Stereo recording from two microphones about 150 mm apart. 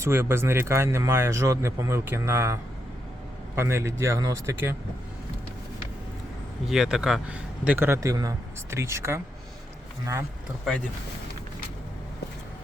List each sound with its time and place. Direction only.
0.0 s a man's voice: 15° right (ahead or behind)
6.7 s a man's voice: centre (ahead or behind); by 9.2 s 20° right (ahead or behind)